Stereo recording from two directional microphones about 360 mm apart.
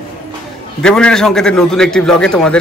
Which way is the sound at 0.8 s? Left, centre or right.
Centre.